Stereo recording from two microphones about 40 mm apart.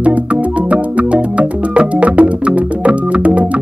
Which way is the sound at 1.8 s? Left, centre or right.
Right.